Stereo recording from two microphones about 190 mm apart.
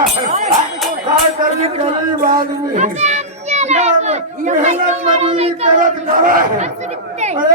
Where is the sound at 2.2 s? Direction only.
45° right (ahead or behind).